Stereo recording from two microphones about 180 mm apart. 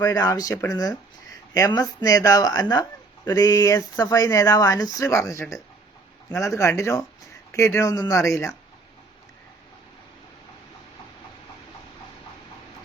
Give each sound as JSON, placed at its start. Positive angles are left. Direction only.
{"t": 0.0, "sound": "speech", "side_deg": 20}